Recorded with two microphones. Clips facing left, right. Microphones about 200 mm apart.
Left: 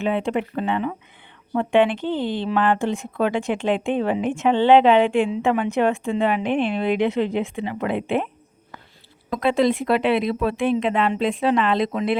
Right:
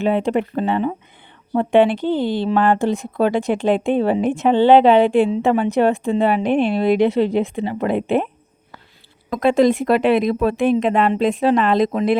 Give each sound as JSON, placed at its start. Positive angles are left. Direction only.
{"t": 0.0, "sound": "speech", "side_deg": -40}
{"t": 9.4, "sound": "speech", "side_deg": -45}